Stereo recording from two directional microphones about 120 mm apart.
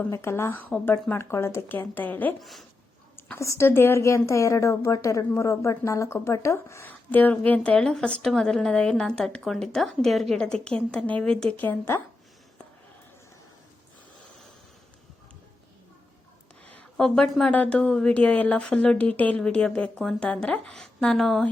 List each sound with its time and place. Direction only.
0.0 s a woman's voice: 20° left (ahead or behind)
2.4 s speech: centre (ahead or behind)
3.3 s a woman's voice: 25° left (ahead or behind)
16.6 s a sound: 10° left (ahead or behind)
17.5 s a woman's voice: 10° left (ahead or behind)